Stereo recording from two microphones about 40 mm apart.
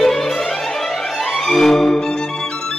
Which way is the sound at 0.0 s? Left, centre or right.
Centre.